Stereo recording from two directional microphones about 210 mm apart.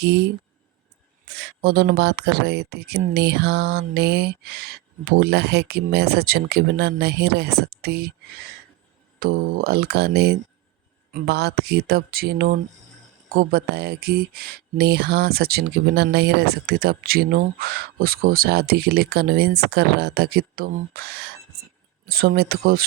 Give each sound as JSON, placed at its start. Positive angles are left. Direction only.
{"t": 0.0, "sound": "speech", "side_deg": -50}
{"t": 9.2, "sound": "speech", "side_deg": -45}